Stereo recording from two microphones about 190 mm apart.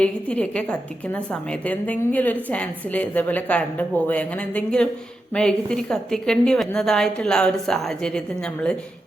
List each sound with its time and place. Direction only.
0.0 s a woman's voice: 5° left (ahead or behind)